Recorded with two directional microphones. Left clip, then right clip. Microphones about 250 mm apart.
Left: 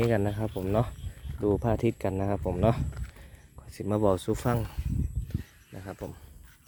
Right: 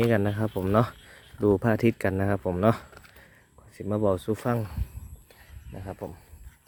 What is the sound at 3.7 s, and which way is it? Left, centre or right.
Speech, centre.